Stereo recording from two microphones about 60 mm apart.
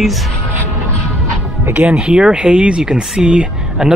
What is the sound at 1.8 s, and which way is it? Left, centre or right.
Speech, centre.